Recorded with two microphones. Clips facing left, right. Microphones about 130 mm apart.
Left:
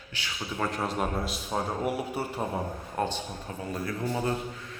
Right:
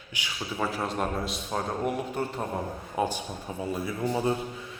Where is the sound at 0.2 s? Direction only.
15° right (ahead or behind).